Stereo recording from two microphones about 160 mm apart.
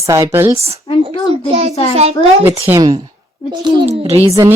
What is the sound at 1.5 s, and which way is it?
Speech, 40° right (ahead or behind).